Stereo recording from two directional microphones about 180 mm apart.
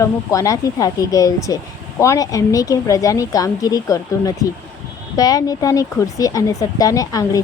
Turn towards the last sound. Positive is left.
turn(degrees=20)  # may be behind; listen again after turning